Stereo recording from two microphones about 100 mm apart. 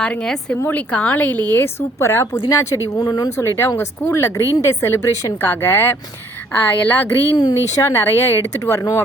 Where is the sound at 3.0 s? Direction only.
40° left (ahead or behind).